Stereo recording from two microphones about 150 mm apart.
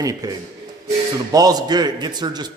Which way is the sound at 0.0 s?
25° right (ahead or behind).